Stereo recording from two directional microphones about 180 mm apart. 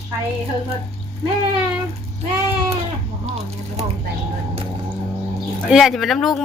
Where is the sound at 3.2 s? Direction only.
35° right (ahead or behind).